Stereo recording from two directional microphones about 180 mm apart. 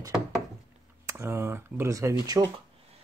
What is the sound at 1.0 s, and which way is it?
Speech, 15° right (ahead or behind).